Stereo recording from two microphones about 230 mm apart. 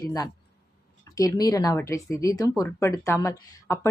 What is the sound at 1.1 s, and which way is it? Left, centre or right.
A woman's voice, centre.